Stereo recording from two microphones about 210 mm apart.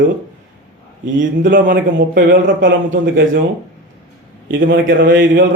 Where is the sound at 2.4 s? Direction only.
60° right (ahead or behind).